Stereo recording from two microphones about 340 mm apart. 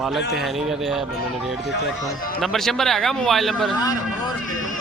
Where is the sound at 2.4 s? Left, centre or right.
Centre.